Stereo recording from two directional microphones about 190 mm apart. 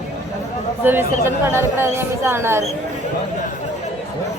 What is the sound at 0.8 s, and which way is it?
A woman's voice, 10° right (ahead or behind).